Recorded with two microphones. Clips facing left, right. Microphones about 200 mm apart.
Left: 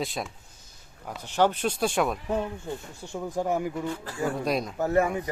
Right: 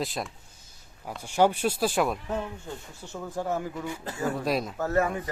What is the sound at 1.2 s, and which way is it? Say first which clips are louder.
Speech: right 1 dB; 10° right (ahead or behind).